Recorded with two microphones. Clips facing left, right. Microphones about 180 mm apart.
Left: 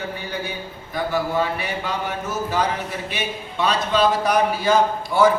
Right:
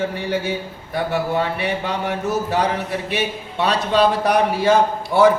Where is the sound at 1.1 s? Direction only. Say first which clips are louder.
Even; 65° right (ahead or behind).